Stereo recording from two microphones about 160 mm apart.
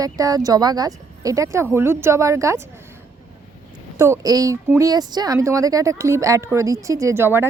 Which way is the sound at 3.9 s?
20° right (ahead or behind).